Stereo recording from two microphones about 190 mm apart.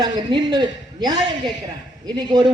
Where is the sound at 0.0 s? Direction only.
25° right (ahead or behind).